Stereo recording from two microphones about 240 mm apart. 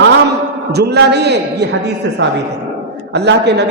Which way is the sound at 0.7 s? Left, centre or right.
Right.